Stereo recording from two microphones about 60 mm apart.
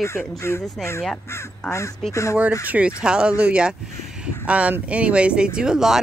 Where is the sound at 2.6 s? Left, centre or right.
Right.